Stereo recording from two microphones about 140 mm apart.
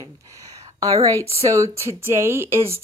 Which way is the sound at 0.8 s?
25° right (ahead or behind).